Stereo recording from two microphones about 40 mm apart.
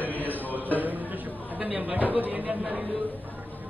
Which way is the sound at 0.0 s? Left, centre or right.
Left.